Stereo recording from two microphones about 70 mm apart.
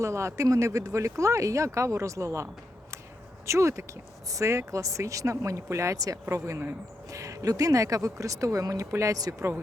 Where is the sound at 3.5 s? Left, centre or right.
Right.